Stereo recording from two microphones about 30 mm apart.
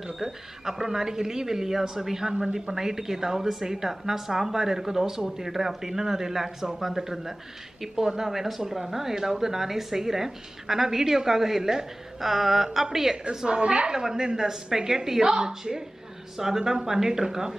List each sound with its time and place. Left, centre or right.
0.2 s a woman's voice: centre
13.5 s a woman's voice: right
13.9 s a woman's voice: right
15.2 s a woman's voice: right